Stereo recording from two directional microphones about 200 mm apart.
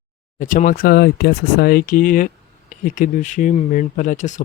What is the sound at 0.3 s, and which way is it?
Speech, 40° left (ahead or behind).